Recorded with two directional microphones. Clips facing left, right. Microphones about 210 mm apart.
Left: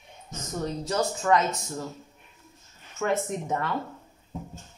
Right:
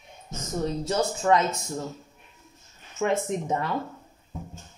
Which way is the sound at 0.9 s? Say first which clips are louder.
Right 1 dB; 25° right (ahead or behind).